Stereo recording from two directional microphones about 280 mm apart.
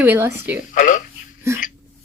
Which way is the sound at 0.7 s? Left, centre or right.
Left.